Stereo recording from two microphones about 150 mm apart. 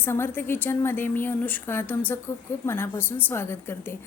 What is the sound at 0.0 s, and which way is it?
A woman's voice, 15° left (ahead or behind).